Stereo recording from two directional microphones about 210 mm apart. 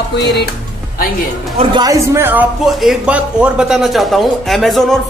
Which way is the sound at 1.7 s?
15° right (ahead or behind).